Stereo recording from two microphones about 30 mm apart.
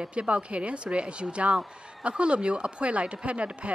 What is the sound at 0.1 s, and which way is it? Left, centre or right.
A man's voice, right.